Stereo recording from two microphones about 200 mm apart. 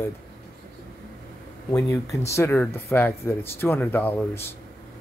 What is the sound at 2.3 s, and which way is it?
Speech, 10° left (ahead or behind).